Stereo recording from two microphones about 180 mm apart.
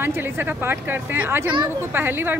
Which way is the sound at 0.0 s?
10° right (ahead or behind).